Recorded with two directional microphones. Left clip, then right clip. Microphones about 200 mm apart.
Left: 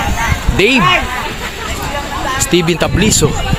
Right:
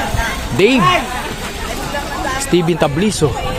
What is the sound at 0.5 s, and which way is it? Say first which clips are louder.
Speech: left 1 dB; centre (ahead or behind).